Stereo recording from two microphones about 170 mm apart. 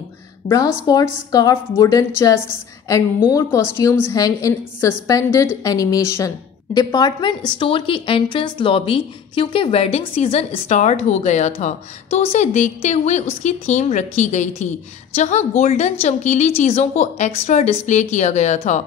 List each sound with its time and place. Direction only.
0.5 s a woman's voice: 20° left (ahead or behind); by 18.8 s 45° left (ahead or behind)